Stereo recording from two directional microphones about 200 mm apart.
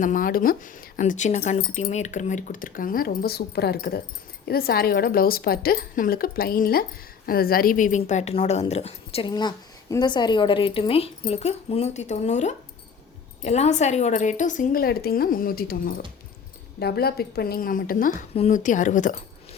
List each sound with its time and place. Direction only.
0.0 s a woman's voice: 45° left (ahead or behind)